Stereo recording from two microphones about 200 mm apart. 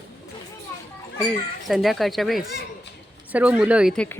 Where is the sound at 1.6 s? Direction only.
Centre (ahead or behind).